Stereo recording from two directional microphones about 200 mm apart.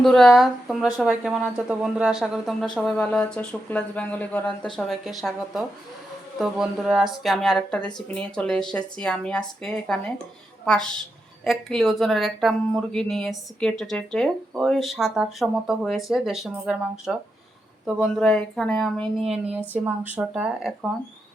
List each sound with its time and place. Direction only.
0.0 s speech: centre (ahead or behind)